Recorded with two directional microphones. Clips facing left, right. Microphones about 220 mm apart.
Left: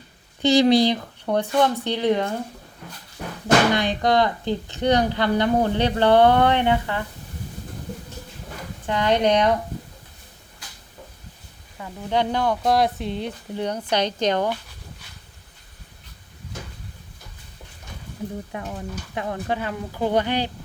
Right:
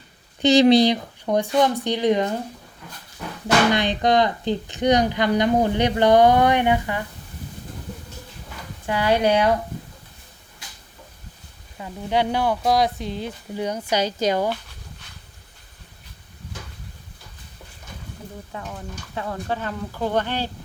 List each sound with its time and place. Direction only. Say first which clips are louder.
0.4 s speech: right 2 dB; 20° right (ahead or behind)
3.8 s speech: right 1 dB; 20° right (ahead or behind)
8.8 s speech: even; 10° right (ahead or behind)
11.8 s speech: right 1 dB; 10° right (ahead or behind)
18.5 s speech: left 3 dB; 15° left (ahead or behind)